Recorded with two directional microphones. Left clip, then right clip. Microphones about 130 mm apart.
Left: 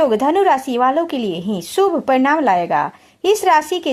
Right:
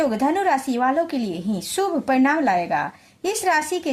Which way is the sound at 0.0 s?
30° left (ahead or behind).